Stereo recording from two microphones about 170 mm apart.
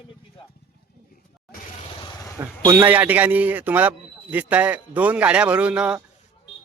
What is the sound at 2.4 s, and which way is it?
A man's voice, 15° right (ahead or behind).